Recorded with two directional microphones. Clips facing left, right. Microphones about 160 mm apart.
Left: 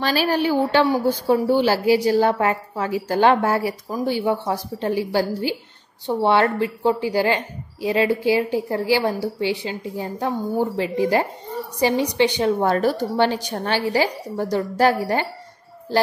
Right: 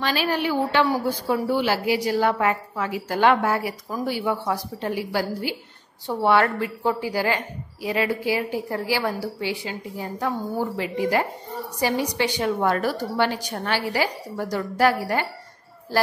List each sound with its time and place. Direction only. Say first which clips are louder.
0.0 s a woman's voice: left 4 dB; 35° left (ahead or behind)